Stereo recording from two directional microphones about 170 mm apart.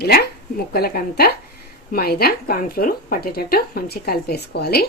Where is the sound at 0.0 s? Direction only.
70° left (ahead or behind).